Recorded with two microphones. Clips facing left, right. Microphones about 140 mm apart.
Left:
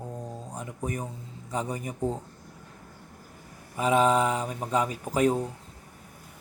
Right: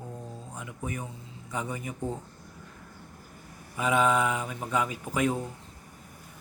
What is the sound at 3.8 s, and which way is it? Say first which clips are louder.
Speech: left 2 dB; 35° left (ahead or behind).